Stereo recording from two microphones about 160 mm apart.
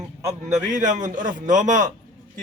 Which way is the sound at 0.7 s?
50° right (ahead or behind).